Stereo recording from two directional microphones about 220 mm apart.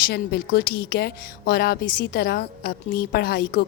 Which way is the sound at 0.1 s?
45° left (ahead or behind).